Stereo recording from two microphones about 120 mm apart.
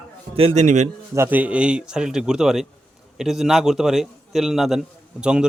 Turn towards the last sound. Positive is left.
turn(degrees=-5)  # may be behind; listen again after turning